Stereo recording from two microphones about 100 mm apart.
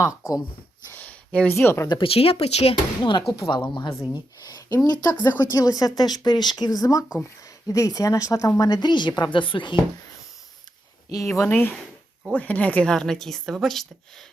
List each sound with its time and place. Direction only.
0.1 s speech: 5° right (ahead or behind)
0.9 s a sound: 15° left (ahead or behind)
1.5 s speech: 25° left (ahead or behind)
1.9 s speech: 65° left (ahead or behind); by 2.7 s 90° left
3.0 s speech: 50° left (ahead or behind)
11.1 s a woman's voice: 30° left (ahead or behind); by 13.8 s centre (ahead or behind)